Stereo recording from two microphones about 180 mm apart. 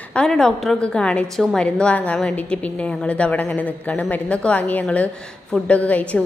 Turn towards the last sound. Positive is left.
turn(degrees=10)  # may be behind; listen again after turning